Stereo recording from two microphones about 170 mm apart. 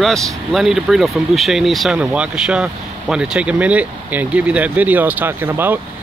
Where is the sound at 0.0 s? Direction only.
Centre (ahead or behind).